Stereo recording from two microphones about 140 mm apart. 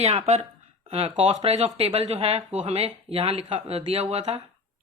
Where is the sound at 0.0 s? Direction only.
50° right (ahead or behind).